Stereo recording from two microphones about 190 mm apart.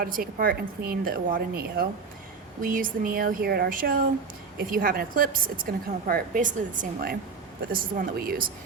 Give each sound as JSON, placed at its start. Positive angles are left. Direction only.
{"t": 0.0, "sound": "a woman's voice", "side_deg": -50}